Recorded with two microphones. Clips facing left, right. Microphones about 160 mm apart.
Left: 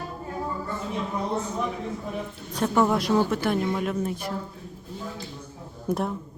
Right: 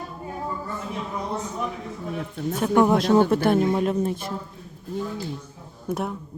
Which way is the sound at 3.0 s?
30° right (ahead or behind).